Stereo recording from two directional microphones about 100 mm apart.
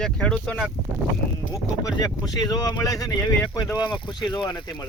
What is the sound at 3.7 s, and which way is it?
Speech, 50° left (ahead or behind).